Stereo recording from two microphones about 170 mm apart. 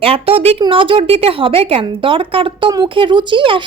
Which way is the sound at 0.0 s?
35° right (ahead or behind).